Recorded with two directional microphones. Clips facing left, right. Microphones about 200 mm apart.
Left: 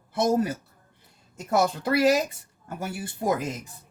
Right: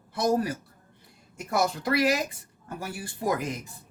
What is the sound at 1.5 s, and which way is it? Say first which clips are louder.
Speech: left 3 dB; 25° left (ahead or behind).